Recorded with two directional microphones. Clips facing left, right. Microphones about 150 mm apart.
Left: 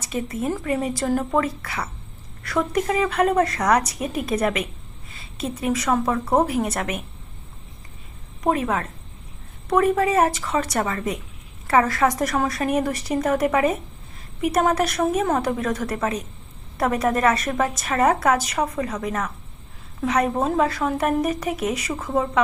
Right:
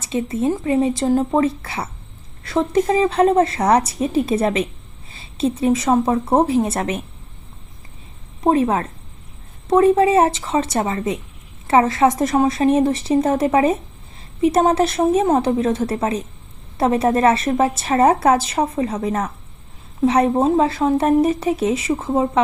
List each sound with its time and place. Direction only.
0.0 s a woman's voice: 25° right (ahead or behind)
8.4 s a woman's voice: 30° right (ahead or behind)